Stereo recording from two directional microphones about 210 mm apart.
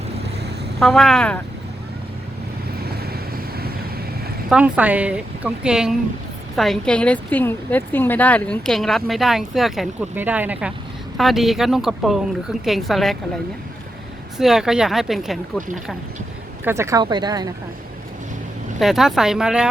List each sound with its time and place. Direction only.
0.8 s speech: centre (ahead or behind)
2.8 s vehicle: 50° right (ahead or behind)
4.4 s speech: 5° right (ahead or behind)
14.3 s speech: centre (ahead or behind)
16.6 s speech: 15° right (ahead or behind)
18.8 s speech: centre (ahead or behind)